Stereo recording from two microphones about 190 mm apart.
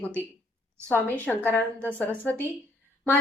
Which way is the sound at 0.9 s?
10° left (ahead or behind).